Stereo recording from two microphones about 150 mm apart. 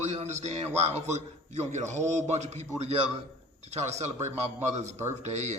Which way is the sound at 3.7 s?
50° right (ahead or behind).